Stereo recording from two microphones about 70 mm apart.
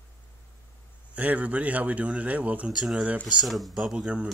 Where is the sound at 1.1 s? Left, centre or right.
Centre.